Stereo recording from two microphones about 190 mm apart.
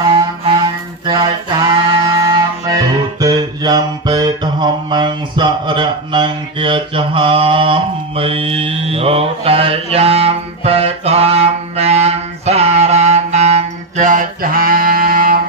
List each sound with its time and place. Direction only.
0.1 s music: 25° right (ahead or behind); by 15.4 s 50° right (ahead or behind)